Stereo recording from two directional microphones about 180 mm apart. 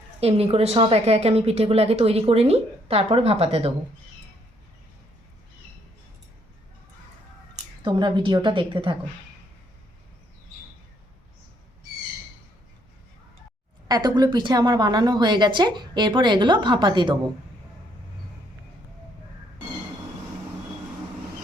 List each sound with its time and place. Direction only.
0.2 s a woman's voice: 35° right (ahead or behind)
7.8 s a woman's voice: 25° right (ahead or behind)
13.8 s a woman's voice: 20° right (ahead or behind)